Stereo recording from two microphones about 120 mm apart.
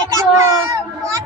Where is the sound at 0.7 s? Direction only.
25° right (ahead or behind).